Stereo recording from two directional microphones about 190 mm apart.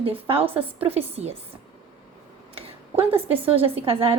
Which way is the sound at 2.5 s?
30° right (ahead or behind).